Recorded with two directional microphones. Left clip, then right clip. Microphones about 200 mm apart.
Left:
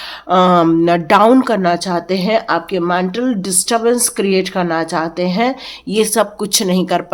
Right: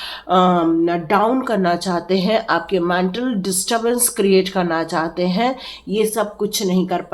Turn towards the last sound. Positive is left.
turn(degrees=45)  # may be behind; listen again after turning